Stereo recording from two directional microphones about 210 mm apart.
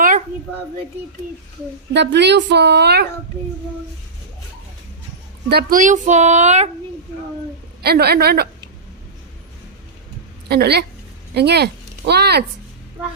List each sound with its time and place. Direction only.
1.9 s speech: 55° right (ahead or behind)
5.5 s speech: 45° right (ahead or behind)
7.8 s speech: 50° right (ahead or behind)
10.5 s speech: 50° right (ahead or behind)